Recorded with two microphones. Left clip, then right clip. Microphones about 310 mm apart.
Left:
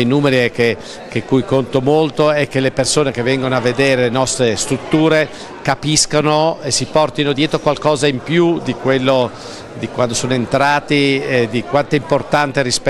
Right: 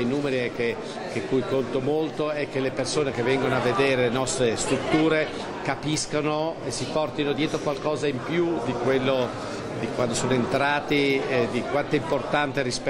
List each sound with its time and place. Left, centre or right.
0.0 s a man's voice: left